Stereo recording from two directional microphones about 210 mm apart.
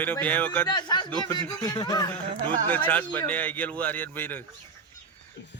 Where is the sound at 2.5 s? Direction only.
5° left (ahead or behind).